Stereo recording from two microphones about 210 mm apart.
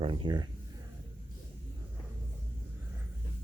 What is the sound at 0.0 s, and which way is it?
Speech, 25° right (ahead or behind).